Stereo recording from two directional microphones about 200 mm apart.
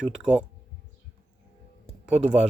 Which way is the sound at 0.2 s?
5° right (ahead or behind).